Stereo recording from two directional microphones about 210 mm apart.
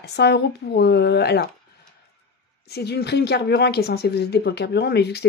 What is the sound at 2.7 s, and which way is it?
Speech, 50° left (ahead or behind).